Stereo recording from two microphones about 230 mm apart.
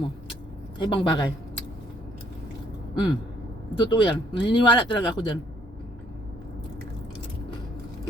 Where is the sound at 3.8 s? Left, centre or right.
Centre.